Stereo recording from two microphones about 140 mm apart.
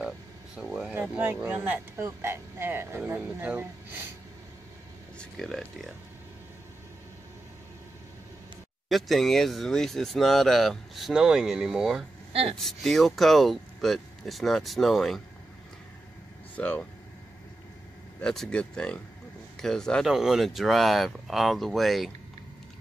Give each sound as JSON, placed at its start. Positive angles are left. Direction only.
{"t": 0.7, "sound": "speech", "side_deg": -5}
{"t": 5.2, "sound": "speech", "side_deg": 5}
{"t": 8.8, "sound": "speech", "side_deg": 0}
{"t": 12.3, "sound": "speech", "side_deg": -45}
{"t": 12.5, "sound": "speech", "side_deg": 0}
{"t": 16.5, "sound": "speech", "side_deg": 10}
{"t": 18.2, "sound": "speech", "side_deg": 5}